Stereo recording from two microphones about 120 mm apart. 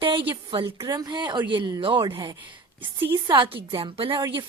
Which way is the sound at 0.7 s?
30° right (ahead or behind).